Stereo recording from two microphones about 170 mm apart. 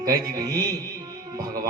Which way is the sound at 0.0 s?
20° right (ahead or behind).